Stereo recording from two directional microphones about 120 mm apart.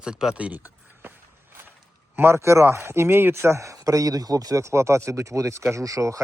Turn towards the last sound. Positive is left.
turn(degrees=-25)  # may be behind; listen again after turning